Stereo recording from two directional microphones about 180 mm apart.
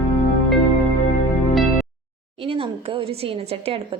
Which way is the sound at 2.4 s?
30° right (ahead or behind).